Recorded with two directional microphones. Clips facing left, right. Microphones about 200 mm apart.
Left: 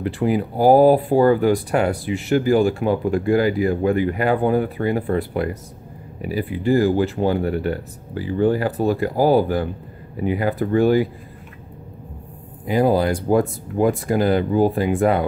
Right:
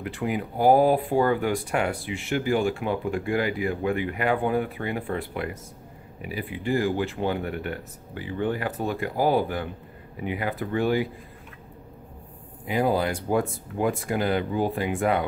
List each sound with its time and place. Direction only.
0.0 s speech: 35° left (ahead or behind)
12.6 s speech: 40° left (ahead or behind)